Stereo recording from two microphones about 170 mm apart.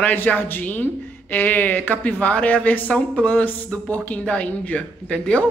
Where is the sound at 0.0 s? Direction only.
10° left (ahead or behind).